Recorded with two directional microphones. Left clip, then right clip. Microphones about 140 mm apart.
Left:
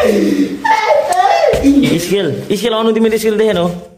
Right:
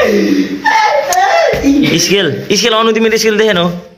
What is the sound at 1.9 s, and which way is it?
Speech, 15° left (ahead or behind).